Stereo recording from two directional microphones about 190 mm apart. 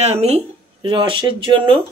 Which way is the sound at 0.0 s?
35° right (ahead or behind).